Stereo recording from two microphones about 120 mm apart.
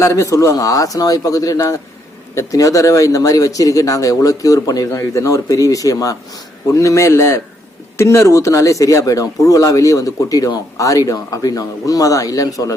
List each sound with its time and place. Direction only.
0.0 s speech: 25° left (ahead or behind)